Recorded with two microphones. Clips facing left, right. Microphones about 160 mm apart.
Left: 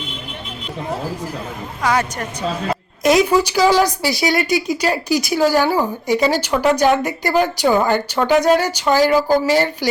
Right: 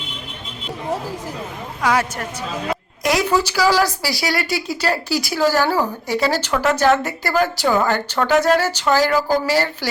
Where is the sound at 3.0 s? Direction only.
20° left (ahead or behind).